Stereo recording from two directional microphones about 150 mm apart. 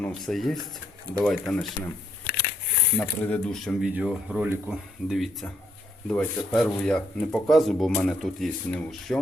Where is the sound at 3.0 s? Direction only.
5° left (ahead or behind).